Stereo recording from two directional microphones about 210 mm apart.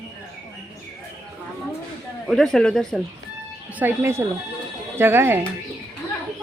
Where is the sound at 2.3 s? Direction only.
Centre (ahead or behind).